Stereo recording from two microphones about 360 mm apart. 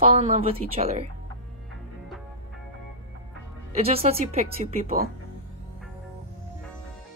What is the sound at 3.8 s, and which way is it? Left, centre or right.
A woman's voice, centre.